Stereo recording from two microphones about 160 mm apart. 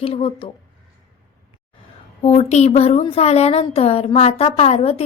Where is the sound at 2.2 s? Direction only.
45° left (ahead or behind).